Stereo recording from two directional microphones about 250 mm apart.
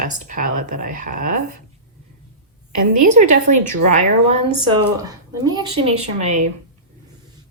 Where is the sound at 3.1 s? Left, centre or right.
Right.